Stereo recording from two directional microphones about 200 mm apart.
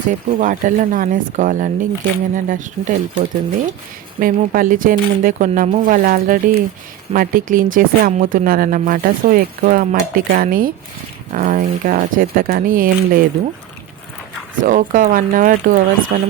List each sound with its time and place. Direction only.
0.1 s speech: 40° right (ahead or behind)
14.6 s speech: 40° right (ahead or behind)